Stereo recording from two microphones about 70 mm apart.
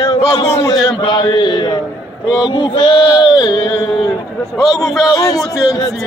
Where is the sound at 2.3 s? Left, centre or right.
Left.